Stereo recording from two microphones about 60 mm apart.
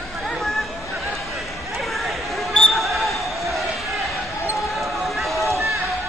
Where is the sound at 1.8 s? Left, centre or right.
Centre.